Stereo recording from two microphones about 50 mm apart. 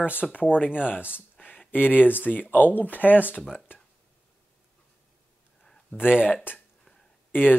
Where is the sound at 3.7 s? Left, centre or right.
Left.